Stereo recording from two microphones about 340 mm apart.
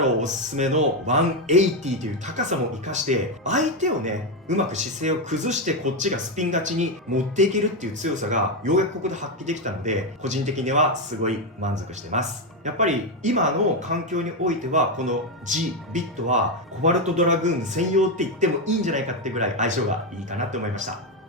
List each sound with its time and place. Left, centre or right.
0.2 s speech: right